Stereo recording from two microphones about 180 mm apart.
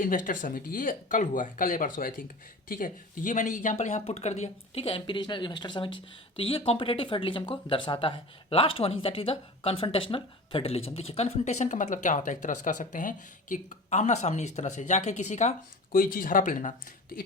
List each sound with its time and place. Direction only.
0.0 s speech: 50° left (ahead or behind)